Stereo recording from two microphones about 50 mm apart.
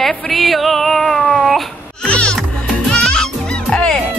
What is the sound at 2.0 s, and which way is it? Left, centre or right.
Music, centre.